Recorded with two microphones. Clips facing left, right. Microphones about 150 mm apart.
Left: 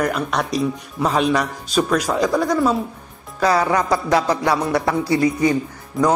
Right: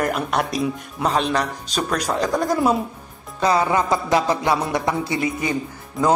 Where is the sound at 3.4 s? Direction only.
25° right (ahead or behind).